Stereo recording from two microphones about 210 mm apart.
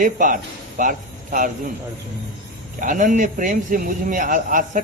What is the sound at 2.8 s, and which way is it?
A man's voice, 40° right (ahead or behind).